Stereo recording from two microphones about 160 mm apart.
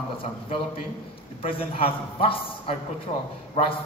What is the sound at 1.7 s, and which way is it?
A man's voice, 35° left (ahead or behind).